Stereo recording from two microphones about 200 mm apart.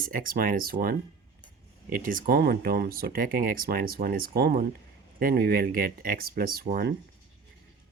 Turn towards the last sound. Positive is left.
turn(degrees=-50)  # may be behind; listen again after turning